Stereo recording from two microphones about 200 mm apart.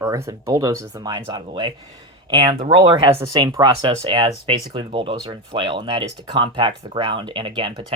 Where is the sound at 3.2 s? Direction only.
20° right (ahead or behind).